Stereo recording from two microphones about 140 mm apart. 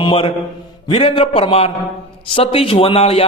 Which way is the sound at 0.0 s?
40° left (ahead or behind).